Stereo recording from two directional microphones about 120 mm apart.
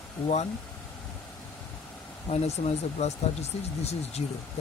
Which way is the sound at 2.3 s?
65° left (ahead or behind).